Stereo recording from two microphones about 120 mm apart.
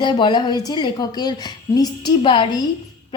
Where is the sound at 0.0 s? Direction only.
40° left (ahead or behind).